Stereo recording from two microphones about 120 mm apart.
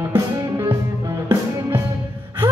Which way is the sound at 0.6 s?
30° right (ahead or behind).